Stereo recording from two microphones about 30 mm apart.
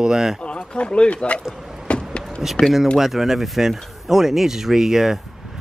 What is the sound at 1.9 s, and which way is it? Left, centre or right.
Vehicle, left.